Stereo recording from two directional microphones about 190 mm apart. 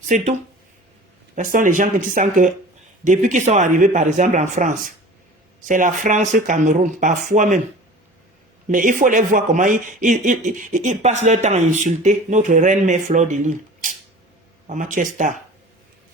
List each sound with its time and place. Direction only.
1.4 s a man's voice: 45° right (ahead or behind)
8.7 s a man's voice: 45° right (ahead or behind)